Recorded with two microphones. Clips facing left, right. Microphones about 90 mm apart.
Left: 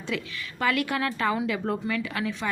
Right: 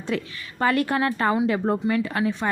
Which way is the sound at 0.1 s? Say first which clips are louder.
Right 4 dB; 40° right (ahead or behind).